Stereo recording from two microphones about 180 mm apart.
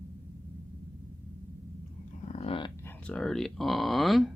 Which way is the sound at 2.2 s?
35° left (ahead or behind).